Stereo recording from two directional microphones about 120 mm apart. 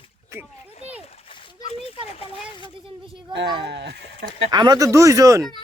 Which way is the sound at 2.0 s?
55° left (ahead or behind).